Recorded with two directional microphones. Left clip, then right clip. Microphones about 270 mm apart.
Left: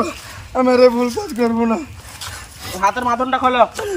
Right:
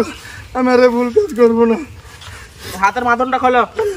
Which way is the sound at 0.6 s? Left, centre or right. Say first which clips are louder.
Right 1 dB; left.